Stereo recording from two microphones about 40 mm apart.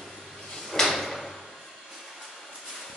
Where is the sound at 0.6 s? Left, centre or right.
Centre.